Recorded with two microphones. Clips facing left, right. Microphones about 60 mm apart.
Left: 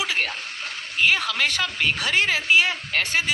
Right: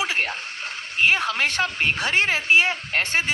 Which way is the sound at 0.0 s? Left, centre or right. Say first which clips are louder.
Right 1 dB; right.